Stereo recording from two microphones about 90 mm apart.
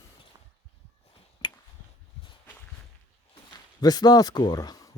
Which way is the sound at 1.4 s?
60° left (ahead or behind).